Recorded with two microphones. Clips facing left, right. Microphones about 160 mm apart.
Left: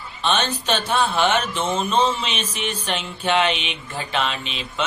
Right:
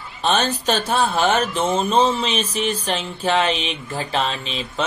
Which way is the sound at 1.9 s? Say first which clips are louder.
Right 3 dB; 35° right (ahead or behind).